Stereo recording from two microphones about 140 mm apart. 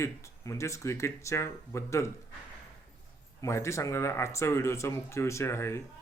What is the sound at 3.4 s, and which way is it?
Speech, 20° left (ahead or behind).